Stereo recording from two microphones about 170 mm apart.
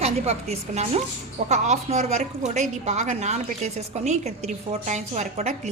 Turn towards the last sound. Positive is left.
turn(degrees=-45)  # may be behind; listen again after turning